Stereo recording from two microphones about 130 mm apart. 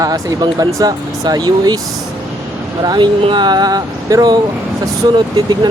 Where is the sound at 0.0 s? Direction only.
30° right (ahead or behind).